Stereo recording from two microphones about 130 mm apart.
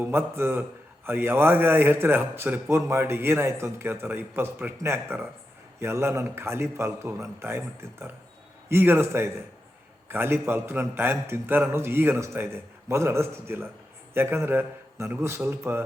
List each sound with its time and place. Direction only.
0.0 s a man's voice: 15° right (ahead or behind)